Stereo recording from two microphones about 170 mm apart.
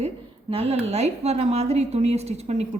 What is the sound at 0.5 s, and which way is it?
A woman's voice, 35° right (ahead or behind).